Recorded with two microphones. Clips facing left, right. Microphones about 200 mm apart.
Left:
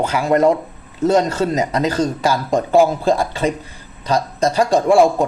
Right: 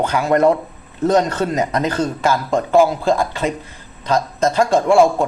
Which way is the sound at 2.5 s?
15° left (ahead or behind).